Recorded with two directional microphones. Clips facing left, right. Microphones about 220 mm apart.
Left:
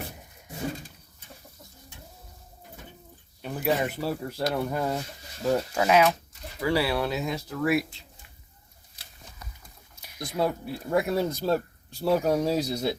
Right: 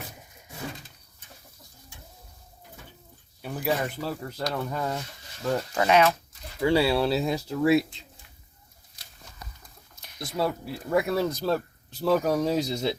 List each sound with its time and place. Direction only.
3.5 s speech: centre (ahead or behind)
6.6 s speech: 25° right (ahead or behind)
9.9 s speech: 10° left (ahead or behind)